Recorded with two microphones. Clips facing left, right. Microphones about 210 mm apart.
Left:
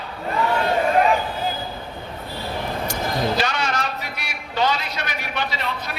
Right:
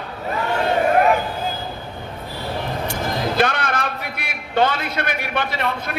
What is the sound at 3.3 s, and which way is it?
A man's voice, 55° right (ahead or behind).